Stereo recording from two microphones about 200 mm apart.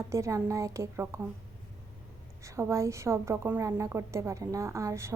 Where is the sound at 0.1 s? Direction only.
15° right (ahead or behind).